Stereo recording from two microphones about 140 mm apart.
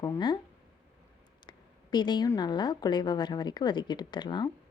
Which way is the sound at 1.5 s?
30° left (ahead or behind).